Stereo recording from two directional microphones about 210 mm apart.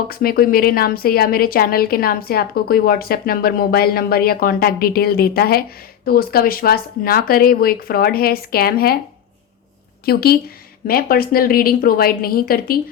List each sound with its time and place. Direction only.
0.1 s a woman's voice: 45° left (ahead or behind)
10.1 s a woman's voice: 45° left (ahead or behind)